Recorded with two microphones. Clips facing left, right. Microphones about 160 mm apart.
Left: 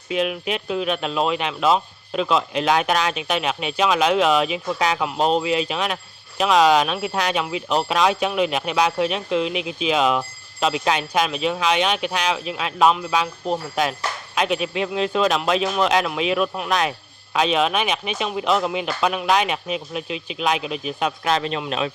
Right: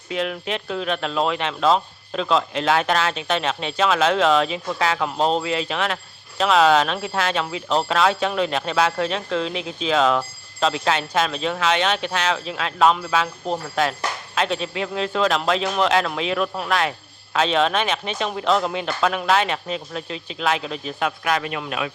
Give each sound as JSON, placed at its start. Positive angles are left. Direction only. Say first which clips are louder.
{"t": 0.1, "sound": "speech", "louder": "left 2 dB", "side_deg": 15}